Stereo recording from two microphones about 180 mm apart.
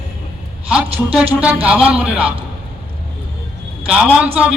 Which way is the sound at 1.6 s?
5° right (ahead or behind).